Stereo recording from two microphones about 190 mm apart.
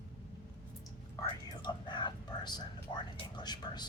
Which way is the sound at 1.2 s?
25° left (ahead or behind).